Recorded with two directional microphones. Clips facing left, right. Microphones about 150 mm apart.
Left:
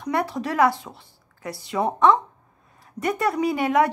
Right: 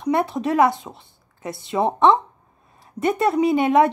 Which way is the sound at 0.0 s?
25° right (ahead or behind).